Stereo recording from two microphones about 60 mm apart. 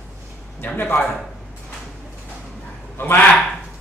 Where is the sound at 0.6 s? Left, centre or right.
Left.